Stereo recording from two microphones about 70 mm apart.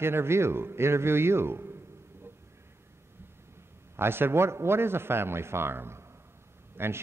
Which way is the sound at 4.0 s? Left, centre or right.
Right.